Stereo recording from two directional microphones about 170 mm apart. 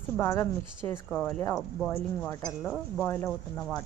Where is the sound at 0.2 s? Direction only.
15° left (ahead or behind).